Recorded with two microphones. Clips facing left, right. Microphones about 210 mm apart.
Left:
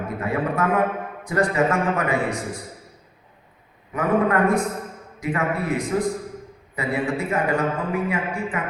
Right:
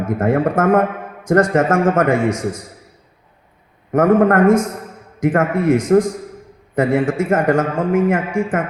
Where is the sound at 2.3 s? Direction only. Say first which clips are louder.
Right 7 dB; 90° right.